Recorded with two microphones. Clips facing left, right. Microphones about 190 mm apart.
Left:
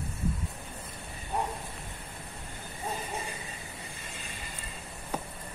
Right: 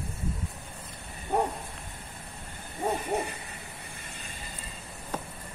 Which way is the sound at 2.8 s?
60° right (ahead or behind).